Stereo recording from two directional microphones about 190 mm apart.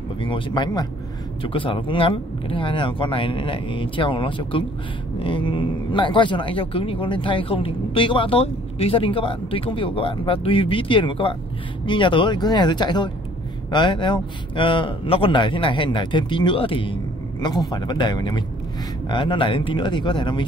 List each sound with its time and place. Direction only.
0.2 s speech: 25° left (ahead or behind)